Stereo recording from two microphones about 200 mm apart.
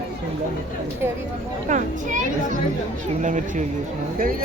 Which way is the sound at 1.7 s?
40° right (ahead or behind).